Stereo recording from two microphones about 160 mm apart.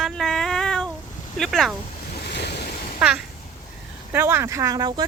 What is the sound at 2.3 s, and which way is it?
Waves, 90° left.